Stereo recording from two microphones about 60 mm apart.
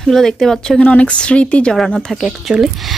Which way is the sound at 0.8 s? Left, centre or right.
Left.